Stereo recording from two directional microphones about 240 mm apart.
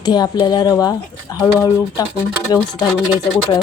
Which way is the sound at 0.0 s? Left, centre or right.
Centre.